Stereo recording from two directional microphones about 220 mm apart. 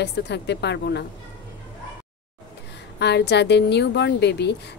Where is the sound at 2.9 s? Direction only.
50° left (ahead or behind).